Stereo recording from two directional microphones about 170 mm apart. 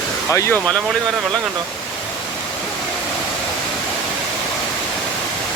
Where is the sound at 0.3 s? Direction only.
15° left (ahead or behind).